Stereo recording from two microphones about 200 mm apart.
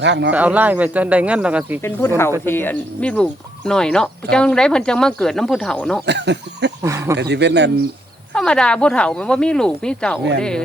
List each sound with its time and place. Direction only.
0.0 s speech: 60° right (ahead or behind)
0.3 s speech: 5° right (ahead or behind)
1.8 s speech: 10° left (ahead or behind)
6.1 s speech: 60° right (ahead or behind)
6.8 s speech: 15° right (ahead or behind)
7.2 s speech: 60° right (ahead or behind)
8.3 s speech: 5° left (ahead or behind)